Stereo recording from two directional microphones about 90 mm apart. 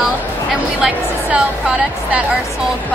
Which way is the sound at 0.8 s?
10° right (ahead or behind).